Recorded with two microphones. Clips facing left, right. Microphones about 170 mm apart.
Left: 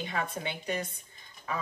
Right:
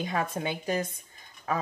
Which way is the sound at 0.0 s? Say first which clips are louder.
Right 4 dB; 40° right (ahead or behind).